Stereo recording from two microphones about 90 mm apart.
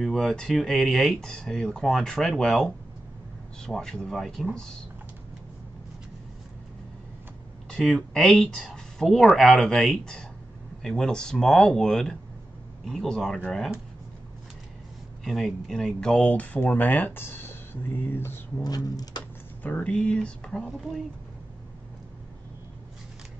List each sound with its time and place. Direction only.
0.0 s speech: 5° left (ahead or behind)
7.7 s speech: 5° left (ahead or behind)
15.2 s speech: centre (ahead or behind); by 18.3 s 25° left (ahead or behind)
18.6 s speech: 45° left (ahead or behind)
19.6 s speech: 15° left (ahead or behind)